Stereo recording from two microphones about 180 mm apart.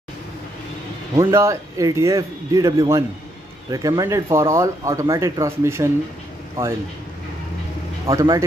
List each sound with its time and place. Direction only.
1.1 s a man's voice: 15° right (ahead or behind)
8.1 s speech: 15° right (ahead or behind)